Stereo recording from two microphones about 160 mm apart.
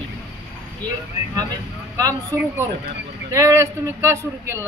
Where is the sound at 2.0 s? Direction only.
20° right (ahead or behind).